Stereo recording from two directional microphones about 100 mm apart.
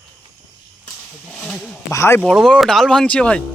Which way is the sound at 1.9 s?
25° left (ahead or behind).